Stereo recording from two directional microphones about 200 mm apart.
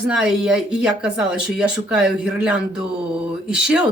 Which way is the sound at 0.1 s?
5° right (ahead or behind).